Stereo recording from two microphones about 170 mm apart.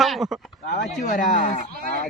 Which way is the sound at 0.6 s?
70° left (ahead or behind).